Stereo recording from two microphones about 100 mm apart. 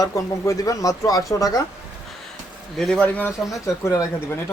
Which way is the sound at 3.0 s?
15° left (ahead or behind).